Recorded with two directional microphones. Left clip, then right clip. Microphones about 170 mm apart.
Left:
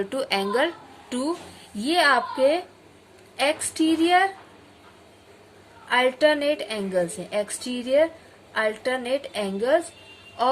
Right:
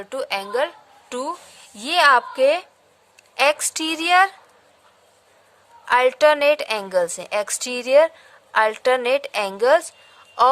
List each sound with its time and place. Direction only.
0.0 s speech: 40° right (ahead or behind)
1.8 s a woman's voice: 55° right (ahead or behind)
5.9 s a woman's voice: 65° right (ahead or behind)